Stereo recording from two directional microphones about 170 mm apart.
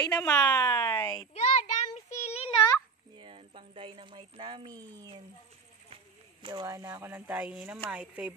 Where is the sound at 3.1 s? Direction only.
30° right (ahead or behind).